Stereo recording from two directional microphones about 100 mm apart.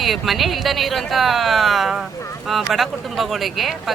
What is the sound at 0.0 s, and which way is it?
Speech, centre (ahead or behind).